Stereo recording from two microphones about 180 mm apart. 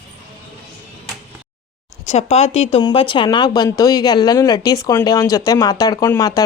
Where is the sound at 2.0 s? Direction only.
40° left (ahead or behind); by 6.4 s 20° left (ahead or behind).